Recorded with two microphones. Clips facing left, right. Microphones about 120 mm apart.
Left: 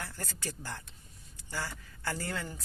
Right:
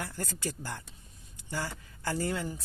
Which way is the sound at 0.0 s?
15° right (ahead or behind).